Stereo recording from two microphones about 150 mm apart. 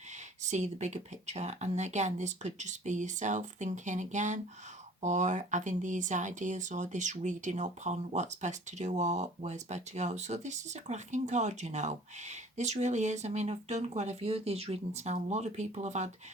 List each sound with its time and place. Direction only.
0.4 s speech: 50° right (ahead or behind)